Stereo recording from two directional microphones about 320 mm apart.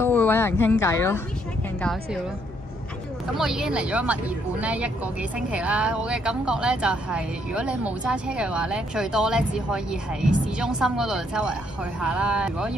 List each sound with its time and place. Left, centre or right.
0.0 s speech: centre
3.3 s speech: centre